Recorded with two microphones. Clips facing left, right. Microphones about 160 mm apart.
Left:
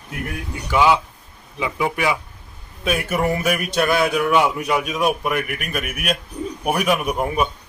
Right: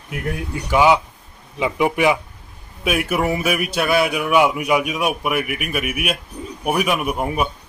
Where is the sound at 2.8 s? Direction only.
10° right (ahead or behind).